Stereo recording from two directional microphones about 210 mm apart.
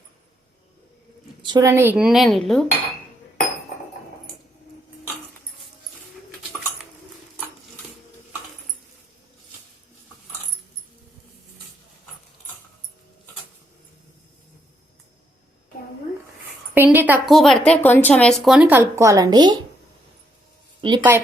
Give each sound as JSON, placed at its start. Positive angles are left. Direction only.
{"t": 1.4, "sound": "a woman's voice", "side_deg": -20}
{"t": 16.7, "sound": "a woman's voice", "side_deg": -10}
{"t": 20.8, "sound": "a woman's voice", "side_deg": -20}